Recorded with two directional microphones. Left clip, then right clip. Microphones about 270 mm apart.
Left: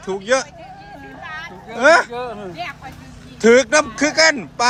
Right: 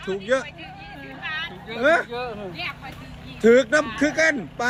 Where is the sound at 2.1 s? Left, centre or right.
Left.